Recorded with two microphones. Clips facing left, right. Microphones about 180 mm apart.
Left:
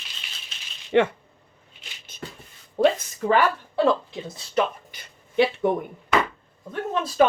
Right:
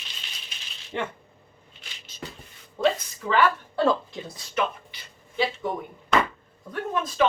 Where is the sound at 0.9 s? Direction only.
80° left.